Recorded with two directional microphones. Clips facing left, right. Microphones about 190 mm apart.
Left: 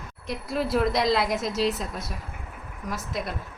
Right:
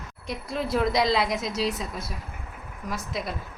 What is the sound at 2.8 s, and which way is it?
Speech, centre (ahead or behind).